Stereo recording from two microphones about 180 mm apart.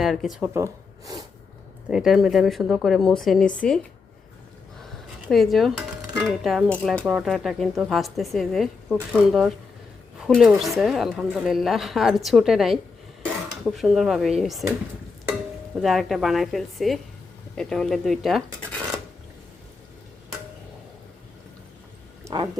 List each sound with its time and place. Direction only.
0.0 s a woman's voice: centre (ahead or behind)
0.5 s speech: 15° right (ahead or behind)
1.9 s a woman's voice: centre (ahead or behind)
5.3 s a woman's voice: centre (ahead or behind)
22.2 s a sound: 25° right (ahead or behind)